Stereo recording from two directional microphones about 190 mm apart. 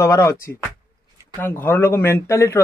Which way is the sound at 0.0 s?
15° left (ahead or behind).